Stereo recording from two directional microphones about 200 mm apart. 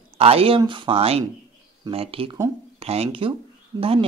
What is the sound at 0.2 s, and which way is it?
Speech, 30° right (ahead or behind).